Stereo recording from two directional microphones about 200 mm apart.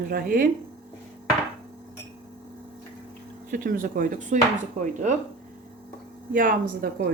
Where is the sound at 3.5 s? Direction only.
40° right (ahead or behind).